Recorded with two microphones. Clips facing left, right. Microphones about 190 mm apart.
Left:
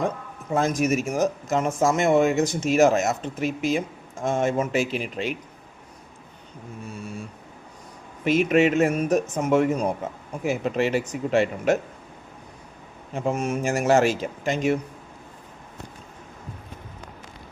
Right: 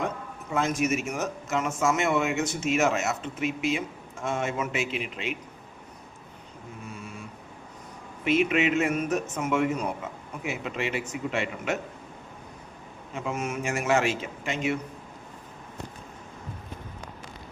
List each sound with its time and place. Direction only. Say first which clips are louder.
0.5 s speech: left 4 dB; 35° left (ahead or behind)
8.2 s speech: left 5 dB; 40° left (ahead or behind)
13.1 s speech: left 6 dB; 35° left (ahead or behind)